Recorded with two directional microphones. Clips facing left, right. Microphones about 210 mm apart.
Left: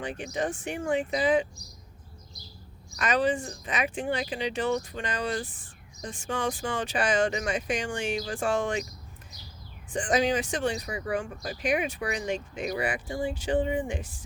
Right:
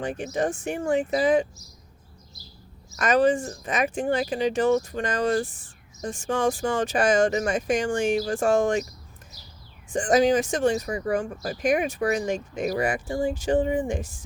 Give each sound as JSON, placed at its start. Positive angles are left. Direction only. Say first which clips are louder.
{"t": 0.0, "sound": "speech", "louder": "right 5 dB", "side_deg": -45}
{"t": 3.0, "sound": "speech", "louder": "right 6 dB", "side_deg": -45}
{"t": 9.9, "sound": "speech", "louder": "right 6 dB", "side_deg": -45}